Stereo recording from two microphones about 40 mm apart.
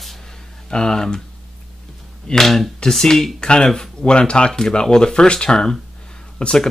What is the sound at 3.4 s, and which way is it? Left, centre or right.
Speech, left.